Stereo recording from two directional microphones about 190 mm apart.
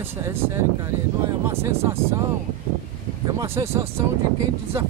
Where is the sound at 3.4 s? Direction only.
15° right (ahead or behind).